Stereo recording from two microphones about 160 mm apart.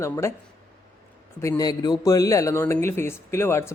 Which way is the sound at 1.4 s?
20° left (ahead or behind).